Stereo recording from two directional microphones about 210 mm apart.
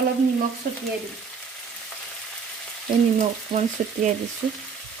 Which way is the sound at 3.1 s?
35° right (ahead or behind).